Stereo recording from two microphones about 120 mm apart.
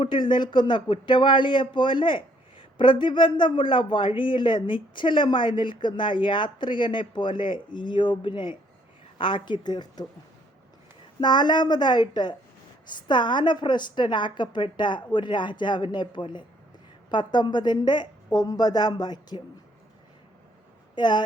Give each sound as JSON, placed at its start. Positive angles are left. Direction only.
{"t": 0.0, "sound": "a woman's voice", "side_deg": 45}
{"t": 11.2, "sound": "a woman's voice", "side_deg": 40}
{"t": 20.9, "sound": "speech", "side_deg": 40}